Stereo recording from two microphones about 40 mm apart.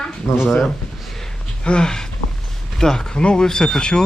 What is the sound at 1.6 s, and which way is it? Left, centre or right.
Speech, centre.